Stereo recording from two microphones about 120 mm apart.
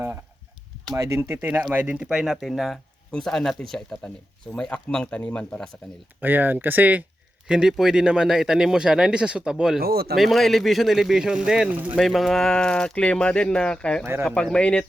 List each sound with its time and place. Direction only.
0.9 s a man's voice: 25° right (ahead or behind); by 5.7 s 10° left (ahead or behind)
6.1 s a man's voice: 15° right (ahead or behind); by 14.0 s 10° left (ahead or behind)
14.0 s speech: 20° right (ahead or behind)
14.3 s speech: 5° left (ahead or behind)